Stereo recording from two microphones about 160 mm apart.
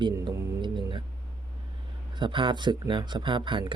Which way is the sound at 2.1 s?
30° right (ahead or behind).